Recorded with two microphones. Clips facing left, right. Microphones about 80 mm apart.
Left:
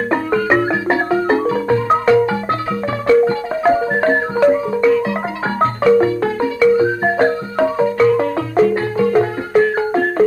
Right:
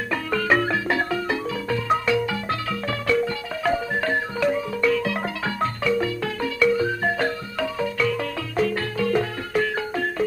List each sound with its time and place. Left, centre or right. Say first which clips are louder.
0.3 s music: left 4 dB; left
5.6 s marimba: left 12 dB; left